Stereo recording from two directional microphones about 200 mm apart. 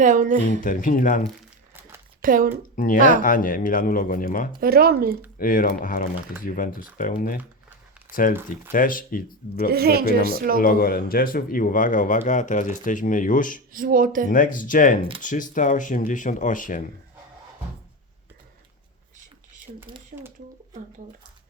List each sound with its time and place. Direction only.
0.0 s speech: 40° right (ahead or behind)
0.6 s speech: 40° left (ahead or behind)
2.2 s speech: 45° right (ahead or behind)
2.7 s speech: 40° left (ahead or behind)
4.6 s speech: 50° right (ahead or behind)
5.4 s speech: 45° left (ahead or behind)
9.6 s speech: 50° right (ahead or behind)
10.6 s speech: 45° left (ahead or behind)
13.7 s speech: 45° right (ahead or behind)
14.3 s speech: 40° left (ahead or behind)
19.7 s speech: 40° right (ahead or behind)
20.1 s a sound: 35° right (ahead or behind)